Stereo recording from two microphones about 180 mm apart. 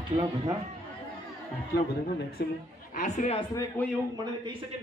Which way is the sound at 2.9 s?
40° left (ahead or behind).